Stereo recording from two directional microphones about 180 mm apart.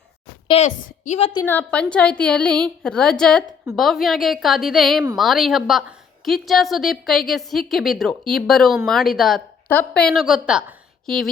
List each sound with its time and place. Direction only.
0.4 s a woman's voice: 35° left (ahead or behind)
1.5 s a woman's voice: 10° left (ahead or behind)